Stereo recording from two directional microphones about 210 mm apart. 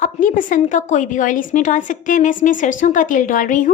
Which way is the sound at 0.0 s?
40° left (ahead or behind).